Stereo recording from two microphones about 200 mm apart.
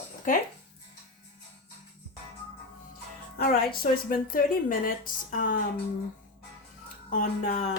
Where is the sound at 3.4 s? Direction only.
45° left (ahead or behind).